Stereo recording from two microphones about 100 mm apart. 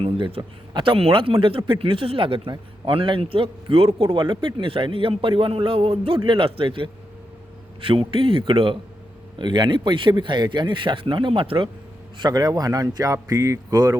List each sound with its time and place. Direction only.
0.0 s a man's voice: 70° right (ahead or behind)
0.7 s a man's voice: 55° right (ahead or behind)
4.0 s a man's voice: 55° right (ahead or behind)
12.1 s speech: 45° right (ahead or behind)